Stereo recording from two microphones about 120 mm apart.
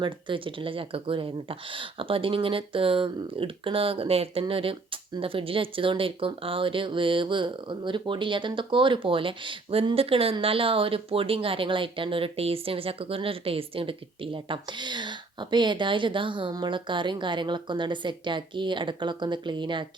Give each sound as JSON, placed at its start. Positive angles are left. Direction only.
{"t": 0.0, "sound": "speech", "side_deg": -45}